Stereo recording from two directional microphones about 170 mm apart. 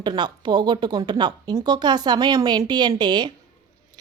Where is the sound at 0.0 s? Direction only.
25° right (ahead or behind).